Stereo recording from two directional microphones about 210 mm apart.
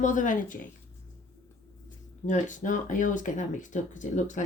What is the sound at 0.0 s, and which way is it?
Speech, 35° left (ahead or behind).